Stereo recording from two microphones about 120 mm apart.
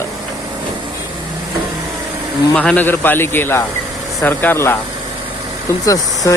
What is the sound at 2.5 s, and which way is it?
Speech, 10° left (ahead or behind).